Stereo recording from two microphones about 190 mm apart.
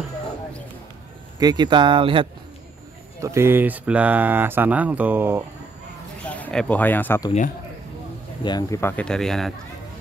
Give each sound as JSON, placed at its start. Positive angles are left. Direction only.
{"t": 1.4, "sound": "speech", "side_deg": -20}
{"t": 3.2, "sound": "speech", "side_deg": -15}
{"t": 6.2, "sound": "speech", "side_deg": 5}
{"t": 8.5, "sound": "speech", "side_deg": 20}